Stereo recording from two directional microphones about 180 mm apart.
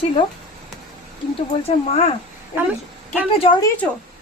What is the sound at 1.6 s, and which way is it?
Speech, 35° left (ahead or behind).